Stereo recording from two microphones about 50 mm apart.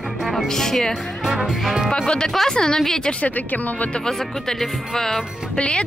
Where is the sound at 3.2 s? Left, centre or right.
Left.